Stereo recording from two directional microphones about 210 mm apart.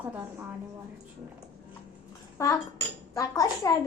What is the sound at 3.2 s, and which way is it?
Speech, 15° left (ahead or behind).